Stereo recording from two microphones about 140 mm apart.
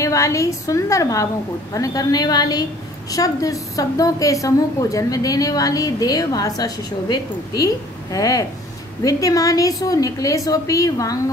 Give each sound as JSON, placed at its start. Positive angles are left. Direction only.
{"t": 0.0, "sound": "a woman's voice", "side_deg": 20}